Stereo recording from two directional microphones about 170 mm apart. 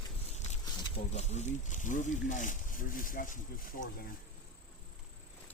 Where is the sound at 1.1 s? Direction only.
40° left (ahead or behind).